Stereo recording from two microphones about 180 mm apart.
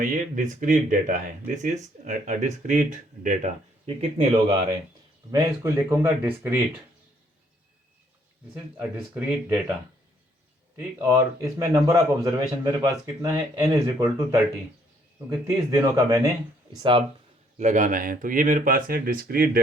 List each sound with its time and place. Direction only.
0.0 s speech: 50° right (ahead or behind); by 4.5 s 30° right (ahead or behind)
5.3 s speech: 15° right (ahead or behind)
8.8 s speech: 10° right (ahead or behind)
10.8 s speech: 10° right (ahead or behind)
17.6 s speech: 45° right (ahead or behind)